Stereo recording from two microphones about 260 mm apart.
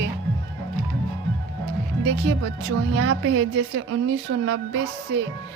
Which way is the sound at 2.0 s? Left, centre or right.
Right.